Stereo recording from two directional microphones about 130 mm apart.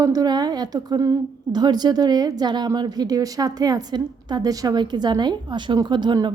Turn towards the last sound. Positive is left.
turn(degrees=-35)  # may be behind; listen again after turning